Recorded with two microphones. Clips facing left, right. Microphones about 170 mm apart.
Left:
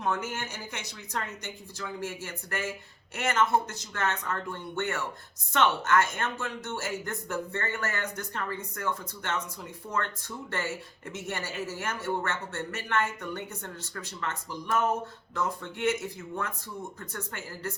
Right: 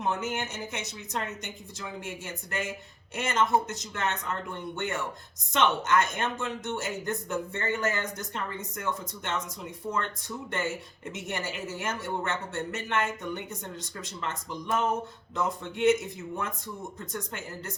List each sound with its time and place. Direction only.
0.0 s speech: 20° right (ahead or behind)